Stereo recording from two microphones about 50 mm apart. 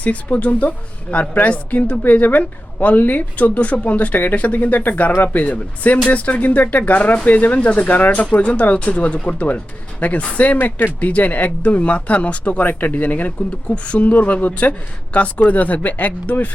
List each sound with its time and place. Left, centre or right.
0.0 s a woman's voice: left